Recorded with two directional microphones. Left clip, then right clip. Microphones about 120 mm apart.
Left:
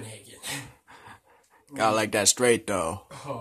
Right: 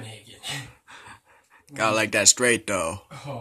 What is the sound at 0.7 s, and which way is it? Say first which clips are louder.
Speech: right 3 dB; 15° left (ahead or behind).